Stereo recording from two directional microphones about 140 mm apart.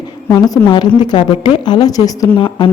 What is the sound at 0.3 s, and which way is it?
A woman's voice, 25° left (ahead or behind).